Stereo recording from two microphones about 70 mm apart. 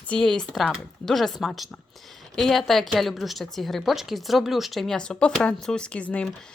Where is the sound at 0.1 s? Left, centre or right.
Centre.